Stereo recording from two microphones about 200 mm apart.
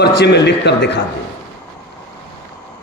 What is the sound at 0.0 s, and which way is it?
Speech, 55° left (ahead or behind).